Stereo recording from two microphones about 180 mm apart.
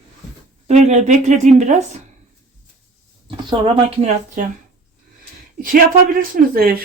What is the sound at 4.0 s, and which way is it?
Speech, 40° right (ahead or behind).